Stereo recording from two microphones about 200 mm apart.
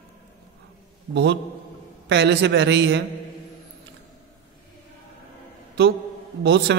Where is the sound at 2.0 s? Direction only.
60° right (ahead or behind).